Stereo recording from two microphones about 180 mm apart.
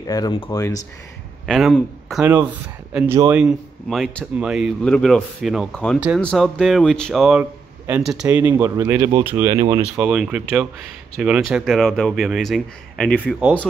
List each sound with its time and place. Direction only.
0.0 s speech: 20° left (ahead or behind)
1.4 s speech: centre (ahead or behind)
5.9 s speech: 5° right (ahead or behind); by 9.8 s 25° right (ahead or behind)
9.9 s speech: 5° right (ahead or behind)